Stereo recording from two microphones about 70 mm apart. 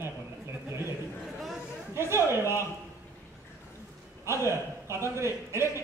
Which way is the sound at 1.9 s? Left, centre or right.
Right.